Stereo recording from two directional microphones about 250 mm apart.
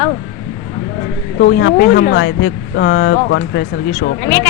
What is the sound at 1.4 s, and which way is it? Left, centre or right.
Speech, left.